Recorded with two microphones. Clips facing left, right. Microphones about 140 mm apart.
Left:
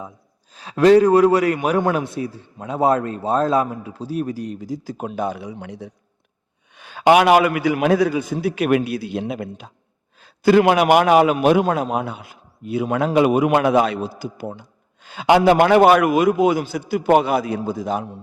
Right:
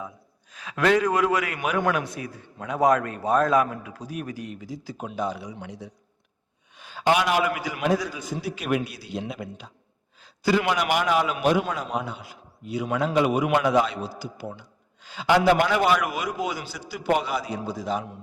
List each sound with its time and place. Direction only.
0.5 s a man's voice: 35° left (ahead or behind); by 11.3 s 60° left (ahead or behind)
11.3 s a man's voice: 50° left (ahead or behind)